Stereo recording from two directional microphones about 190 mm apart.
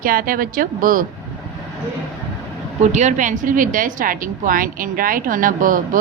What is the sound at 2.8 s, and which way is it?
Speech, 40° right (ahead or behind).